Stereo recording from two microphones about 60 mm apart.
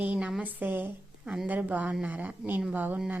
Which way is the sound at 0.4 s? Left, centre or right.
Right.